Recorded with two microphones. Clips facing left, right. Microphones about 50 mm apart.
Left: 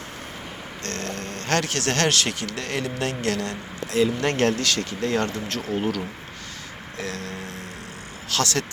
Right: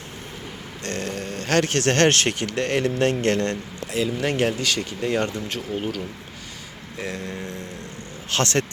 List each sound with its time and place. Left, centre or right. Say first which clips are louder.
0.9 s speech: right 3 dB; centre
1.6 s speech: right 4 dB; right
3.9 s speech: left 2 dB; centre
7.0 s music: right 2 dB; centre
8.3 s speech: right 2 dB; right